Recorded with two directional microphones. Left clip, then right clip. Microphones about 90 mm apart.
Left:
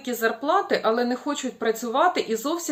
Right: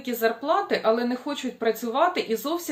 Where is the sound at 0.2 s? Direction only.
40° left (ahead or behind).